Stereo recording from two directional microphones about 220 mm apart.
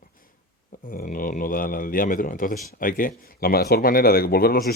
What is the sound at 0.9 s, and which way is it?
A man's voice, 40° left (ahead or behind).